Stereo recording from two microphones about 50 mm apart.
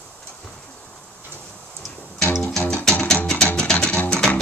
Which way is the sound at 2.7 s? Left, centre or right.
Centre.